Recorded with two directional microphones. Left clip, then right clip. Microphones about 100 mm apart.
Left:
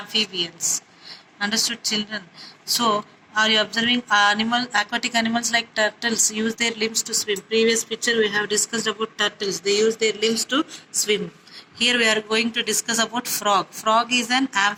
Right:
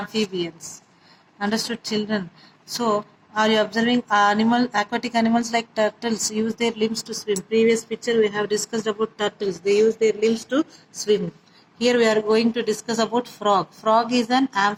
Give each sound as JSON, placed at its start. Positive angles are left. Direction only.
{"t": 0.0, "sound": "a woman's voice", "side_deg": -80}
{"t": 2.6, "sound": "speech", "side_deg": -60}
{"t": 11.8, "sound": "speech", "side_deg": -65}